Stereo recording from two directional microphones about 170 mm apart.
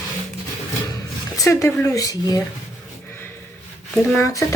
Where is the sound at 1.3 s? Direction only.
15° left (ahead or behind).